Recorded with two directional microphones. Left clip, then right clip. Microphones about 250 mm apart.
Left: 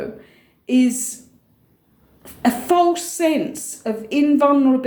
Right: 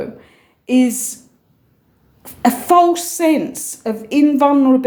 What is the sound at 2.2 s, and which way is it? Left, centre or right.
A woman's voice, right.